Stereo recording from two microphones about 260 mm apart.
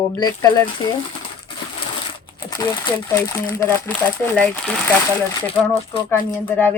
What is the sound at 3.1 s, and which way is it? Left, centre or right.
Speech, centre.